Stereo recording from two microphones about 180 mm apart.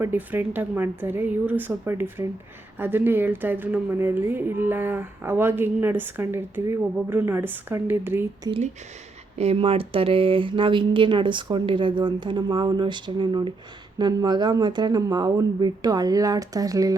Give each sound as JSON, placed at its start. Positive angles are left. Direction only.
{"t": 0.0, "sound": "a woman's voice", "side_deg": -10}
{"t": 8.4, "sound": "speech", "side_deg": -35}